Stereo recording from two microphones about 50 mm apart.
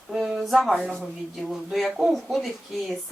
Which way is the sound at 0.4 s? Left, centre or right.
Centre.